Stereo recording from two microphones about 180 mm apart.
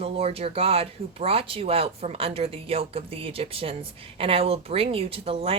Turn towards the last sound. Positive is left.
turn(degrees=-35)  # may be behind; listen again after turning